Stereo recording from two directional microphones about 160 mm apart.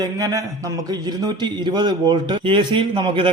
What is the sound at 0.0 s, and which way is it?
A man's voice, 20° right (ahead or behind).